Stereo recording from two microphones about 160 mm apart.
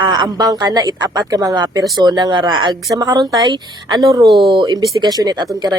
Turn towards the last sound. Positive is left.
turn(degrees=-25)  # may be behind; listen again after turning